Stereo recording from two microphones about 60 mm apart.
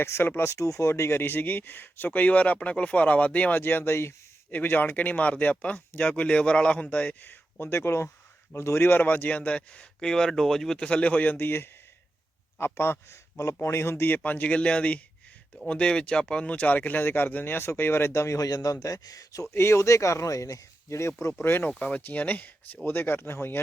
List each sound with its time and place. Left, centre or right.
0.0 s a man's voice: left
0.5 s speech: left
4.5 s speech: left
7.6 s a man's voice: left
14.3 s speech: left
18.3 s speech: left
19.5 s speech: left
21.4 s speech: left
21.7 s speech: centre
22.0 s speech: left